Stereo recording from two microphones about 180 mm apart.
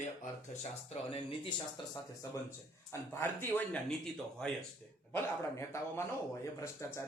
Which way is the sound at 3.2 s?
10° left (ahead or behind).